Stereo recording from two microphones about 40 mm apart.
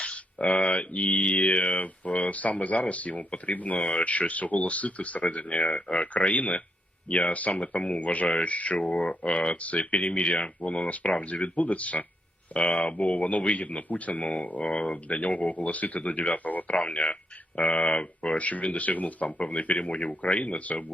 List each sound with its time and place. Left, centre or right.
0.0 s mantra: left
1.4 s speech: left
18.3 s speech: left